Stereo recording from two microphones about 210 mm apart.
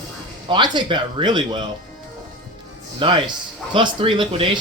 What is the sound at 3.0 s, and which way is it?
Speech, 25° right (ahead or behind).